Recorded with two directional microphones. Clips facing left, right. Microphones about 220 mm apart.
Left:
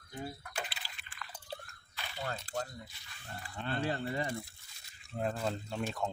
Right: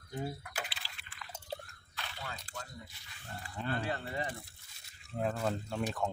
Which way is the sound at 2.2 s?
40° left (ahead or behind).